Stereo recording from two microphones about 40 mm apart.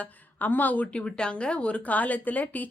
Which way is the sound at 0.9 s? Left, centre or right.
Left.